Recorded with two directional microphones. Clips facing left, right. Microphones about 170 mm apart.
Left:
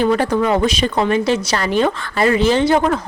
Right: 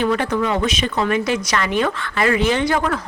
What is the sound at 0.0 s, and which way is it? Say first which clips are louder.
Speech: left 3 dB; 35° left (ahead or behind).